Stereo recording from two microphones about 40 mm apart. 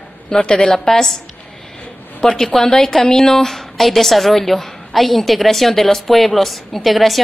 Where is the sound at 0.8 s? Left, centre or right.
Centre.